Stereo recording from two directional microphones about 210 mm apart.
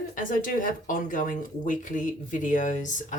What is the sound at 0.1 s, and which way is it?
Speech, 40° left (ahead or behind).